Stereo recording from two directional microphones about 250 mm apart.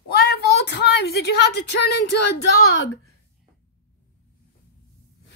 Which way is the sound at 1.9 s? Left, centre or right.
Left.